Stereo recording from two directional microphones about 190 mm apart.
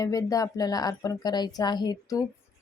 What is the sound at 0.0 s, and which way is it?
A woman's voice, 20° left (ahead or behind).